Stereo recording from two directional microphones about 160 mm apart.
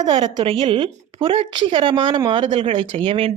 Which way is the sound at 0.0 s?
30° right (ahead or behind).